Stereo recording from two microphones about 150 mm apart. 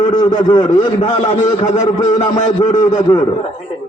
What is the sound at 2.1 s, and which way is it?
Speech, 45° left (ahead or behind).